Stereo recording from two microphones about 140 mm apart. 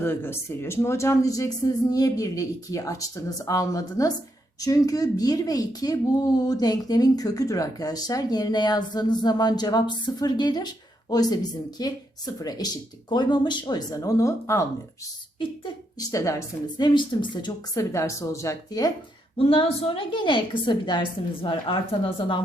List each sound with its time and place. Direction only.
0.0 s speech: 15° left (ahead or behind)
15.4 s speech: 35° left (ahead or behind)
16.1 s a woman's voice: 20° left (ahead or behind)
17.9 s speech: 20° left (ahead or behind)
19.4 s a woman's voice: 40° left (ahead or behind)